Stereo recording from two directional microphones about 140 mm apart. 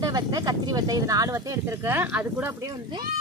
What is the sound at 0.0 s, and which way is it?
Speech, 25° right (ahead or behind).